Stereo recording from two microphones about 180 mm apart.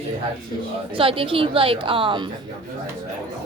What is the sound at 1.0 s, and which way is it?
A woman's voice, 30° right (ahead or behind).